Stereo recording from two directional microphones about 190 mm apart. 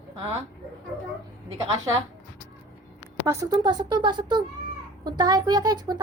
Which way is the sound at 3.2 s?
15° right (ahead or behind).